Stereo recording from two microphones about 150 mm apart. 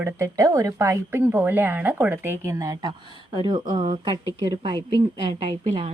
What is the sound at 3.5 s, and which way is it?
A woman's voice, 30° right (ahead or behind).